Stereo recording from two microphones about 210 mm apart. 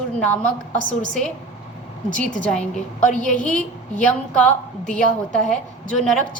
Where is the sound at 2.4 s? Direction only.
5° left (ahead or behind).